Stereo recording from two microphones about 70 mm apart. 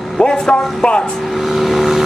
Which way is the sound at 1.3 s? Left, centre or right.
Centre.